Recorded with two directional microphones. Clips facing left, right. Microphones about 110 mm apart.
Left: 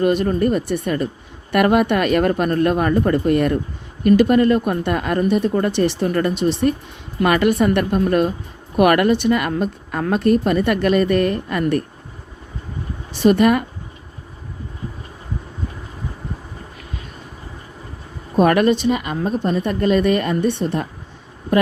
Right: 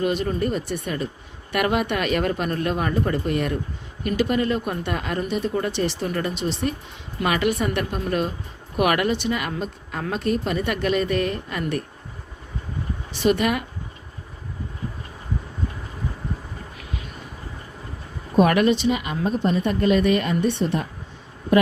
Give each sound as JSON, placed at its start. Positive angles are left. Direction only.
{"t": 0.0, "sound": "a woman's voice", "side_deg": 50}
{"t": 13.2, "sound": "a woman's voice", "side_deg": 45}
{"t": 18.4, "sound": "a woman's voice", "side_deg": 40}